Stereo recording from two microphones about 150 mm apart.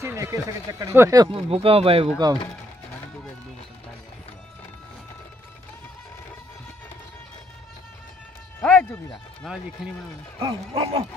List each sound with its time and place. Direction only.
0.0 s speech: 20° right (ahead or behind)
1.3 s speech: 40° right (ahead or behind)
8.5 s music: 10° left (ahead or behind)
9.4 s speech: centre (ahead or behind)
10.4 s speech: 35° right (ahead or behind)